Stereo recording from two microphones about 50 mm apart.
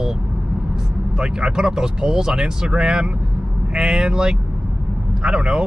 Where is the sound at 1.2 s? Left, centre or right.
Centre.